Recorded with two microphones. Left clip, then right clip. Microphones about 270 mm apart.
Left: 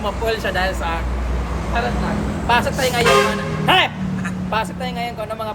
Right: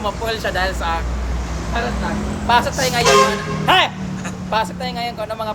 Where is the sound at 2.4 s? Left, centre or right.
Centre.